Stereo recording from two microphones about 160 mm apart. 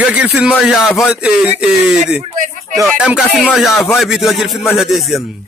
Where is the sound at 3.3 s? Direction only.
10° left (ahead or behind).